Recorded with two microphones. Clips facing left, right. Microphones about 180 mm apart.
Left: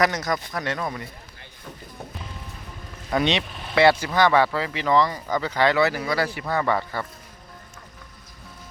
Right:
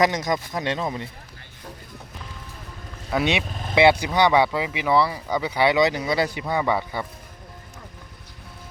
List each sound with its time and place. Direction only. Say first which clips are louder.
0.0 s speech: right 2 dB; 20° right (ahead or behind)
3.1 s speech: even; 5° right (ahead or behind)